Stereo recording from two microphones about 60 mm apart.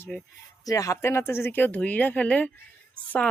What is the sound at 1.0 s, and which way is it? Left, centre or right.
Speech, left.